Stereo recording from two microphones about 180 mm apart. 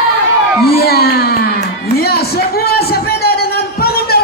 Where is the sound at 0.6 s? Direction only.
60° left (ahead or behind).